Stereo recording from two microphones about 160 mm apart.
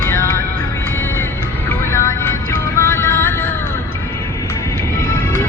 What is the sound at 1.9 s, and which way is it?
Music, 20° left (ahead or behind).